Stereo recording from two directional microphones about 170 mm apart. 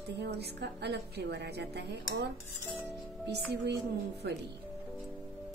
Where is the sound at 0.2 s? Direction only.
75° right (ahead or behind).